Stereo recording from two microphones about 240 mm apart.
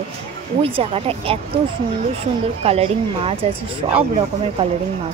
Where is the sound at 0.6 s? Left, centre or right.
Right.